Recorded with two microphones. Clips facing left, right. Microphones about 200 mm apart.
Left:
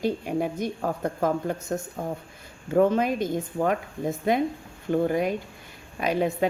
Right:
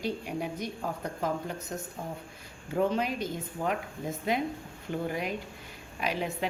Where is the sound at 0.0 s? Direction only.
50° left (ahead or behind).